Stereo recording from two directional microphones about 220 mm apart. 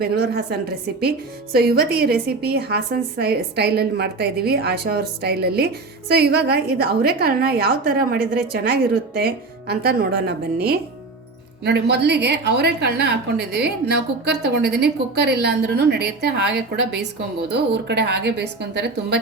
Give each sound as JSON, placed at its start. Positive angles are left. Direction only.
{"t": 0.0, "sound": "a woman's voice", "side_deg": -45}
{"t": 1.5, "sound": "a woman's voice", "side_deg": -45}